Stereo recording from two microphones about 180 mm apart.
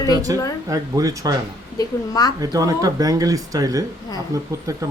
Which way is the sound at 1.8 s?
20° left (ahead or behind).